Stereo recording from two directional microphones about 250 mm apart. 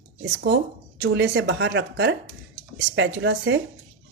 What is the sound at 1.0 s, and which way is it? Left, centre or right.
A woman's voice, right.